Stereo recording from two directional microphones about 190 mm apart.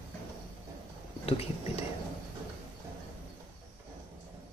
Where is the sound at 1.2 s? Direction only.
30° left (ahead or behind).